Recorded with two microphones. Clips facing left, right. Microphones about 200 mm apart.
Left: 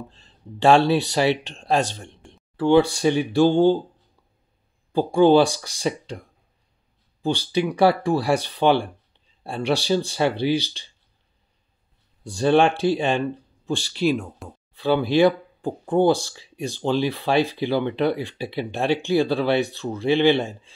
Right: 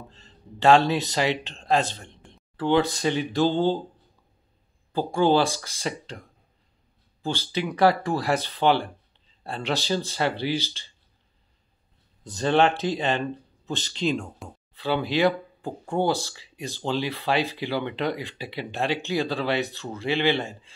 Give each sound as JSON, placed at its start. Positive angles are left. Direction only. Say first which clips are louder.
{"t": 0.1, "sound": "speech", "louder": "left 4 dB", "side_deg": 15}
{"t": 0.7, "sound": "speech", "louder": "left 2 dB", "side_deg": -15}
{"t": 0.9, "sound": "speech", "louder": "left 5 dB", "side_deg": 10}
{"t": 4.9, "sound": "speech", "louder": "left 6 dB", "side_deg": 15}
{"t": 12.2, "sound": "speech", "louder": "left 4 dB", "side_deg": 10}
{"t": 19.1, "sound": "speech", "louder": "left 6 dB", "side_deg": 15}